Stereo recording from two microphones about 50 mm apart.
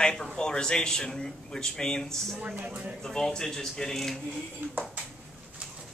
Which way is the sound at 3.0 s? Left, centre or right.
Centre.